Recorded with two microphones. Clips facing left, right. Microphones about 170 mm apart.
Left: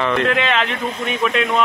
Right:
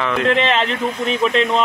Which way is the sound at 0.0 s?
5° right (ahead or behind).